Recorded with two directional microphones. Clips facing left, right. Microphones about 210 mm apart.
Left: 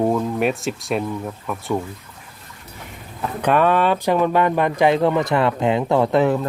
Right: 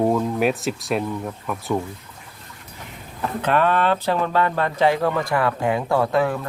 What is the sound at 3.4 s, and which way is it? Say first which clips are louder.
Speech: left 3 dB; 15° left (ahead or behind).